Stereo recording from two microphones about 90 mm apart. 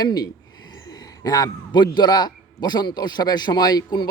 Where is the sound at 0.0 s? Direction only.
50° left (ahead or behind).